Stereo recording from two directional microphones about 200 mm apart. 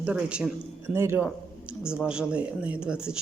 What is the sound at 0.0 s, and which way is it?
Speech, 5° right (ahead or behind).